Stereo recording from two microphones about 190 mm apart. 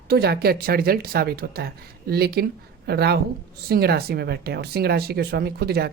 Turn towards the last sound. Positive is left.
turn(degrees=-55)  # may be behind; listen again after turning